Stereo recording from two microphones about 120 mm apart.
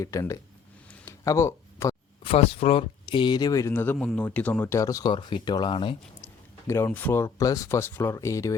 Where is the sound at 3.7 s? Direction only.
15° left (ahead or behind).